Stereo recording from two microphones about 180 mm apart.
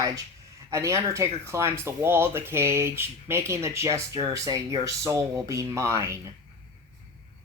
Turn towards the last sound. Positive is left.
turn(degrees=-15)  # may be behind; listen again after turning